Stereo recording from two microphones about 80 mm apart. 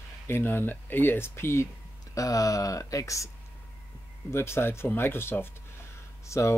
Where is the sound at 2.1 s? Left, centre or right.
Left.